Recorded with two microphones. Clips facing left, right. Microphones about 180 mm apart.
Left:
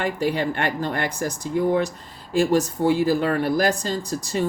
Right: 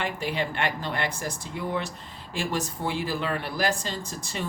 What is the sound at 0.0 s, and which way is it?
Speech, 40° left (ahead or behind).